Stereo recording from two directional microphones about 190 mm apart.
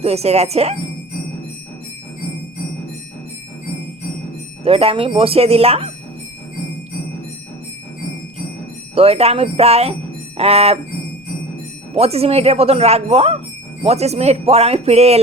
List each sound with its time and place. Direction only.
0.0 s speech: 35° right (ahead or behind)
4.6 s speech: 30° right (ahead or behind)
9.0 s speech: 30° right (ahead or behind)
11.9 s speech: 30° right (ahead or behind)